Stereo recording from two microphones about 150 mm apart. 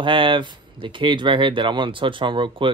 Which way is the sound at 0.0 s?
35° right (ahead or behind).